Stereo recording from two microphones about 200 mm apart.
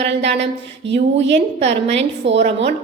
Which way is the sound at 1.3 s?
30° right (ahead or behind).